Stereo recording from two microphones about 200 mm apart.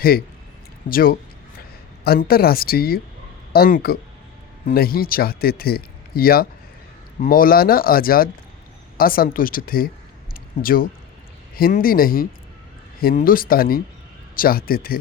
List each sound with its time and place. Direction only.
0.9 s speech: 45° left (ahead or behind)